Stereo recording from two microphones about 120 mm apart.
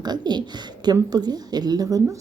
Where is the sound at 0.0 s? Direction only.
35° right (ahead or behind).